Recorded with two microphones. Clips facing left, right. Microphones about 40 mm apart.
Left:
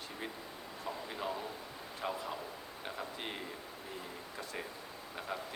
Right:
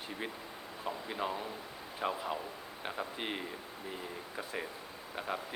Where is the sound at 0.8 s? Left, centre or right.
Centre.